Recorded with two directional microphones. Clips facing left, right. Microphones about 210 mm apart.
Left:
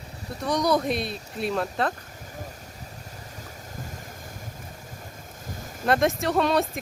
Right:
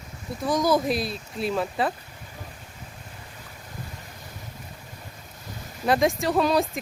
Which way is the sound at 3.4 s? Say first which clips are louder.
Left 2 dB; 45° left (ahead or behind).